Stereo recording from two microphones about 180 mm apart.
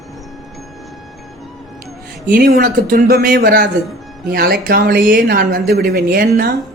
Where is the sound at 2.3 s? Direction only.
60° right (ahead or behind).